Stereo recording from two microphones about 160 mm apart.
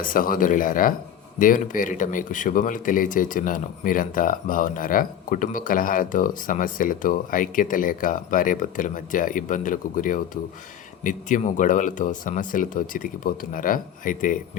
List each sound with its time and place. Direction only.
0.0 s speech: 60° left (ahead or behind)